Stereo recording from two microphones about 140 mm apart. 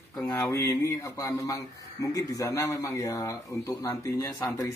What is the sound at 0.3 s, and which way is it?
Speech, 20° left (ahead or behind).